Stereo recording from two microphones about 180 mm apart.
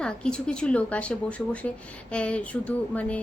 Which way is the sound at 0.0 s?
5° left (ahead or behind).